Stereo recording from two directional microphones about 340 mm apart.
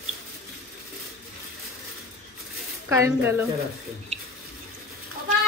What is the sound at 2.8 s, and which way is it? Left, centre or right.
Speech, centre.